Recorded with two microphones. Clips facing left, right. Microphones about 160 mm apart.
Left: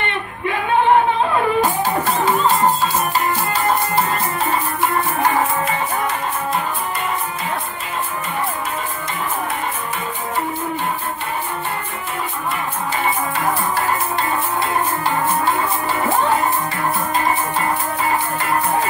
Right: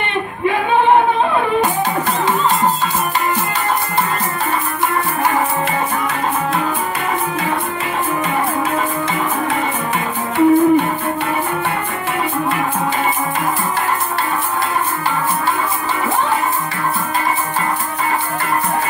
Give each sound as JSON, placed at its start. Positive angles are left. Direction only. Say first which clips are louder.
{"t": 9.9, "sound": "music", "louder": "right 7 dB", "side_deg": -70}